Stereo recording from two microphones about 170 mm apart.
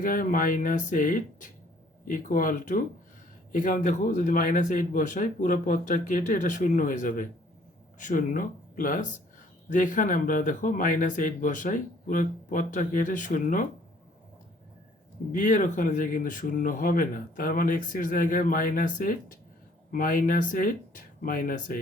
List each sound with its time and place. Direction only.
0.0 s speech: 55° left (ahead or behind)
15.3 s speech: 50° left (ahead or behind)